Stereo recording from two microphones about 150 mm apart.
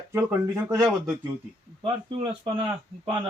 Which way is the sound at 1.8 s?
40° right (ahead or behind).